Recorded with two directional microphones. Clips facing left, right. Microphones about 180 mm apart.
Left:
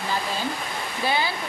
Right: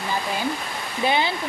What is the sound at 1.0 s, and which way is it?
Speech, 20° right (ahead or behind).